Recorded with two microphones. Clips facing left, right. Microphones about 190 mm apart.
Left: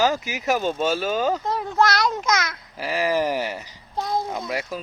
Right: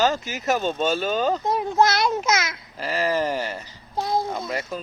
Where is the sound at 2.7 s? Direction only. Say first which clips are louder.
Left 1 dB; 15° left (ahead or behind).